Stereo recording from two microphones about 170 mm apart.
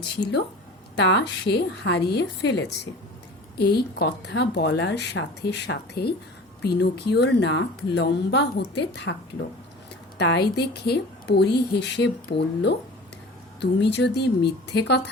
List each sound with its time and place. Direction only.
0.9 s a woman's voice: 90° left
3.6 s a woman's voice: 70° left (ahead or behind); by 9.1 s 85° left
10.2 s a woman's voice: 80° left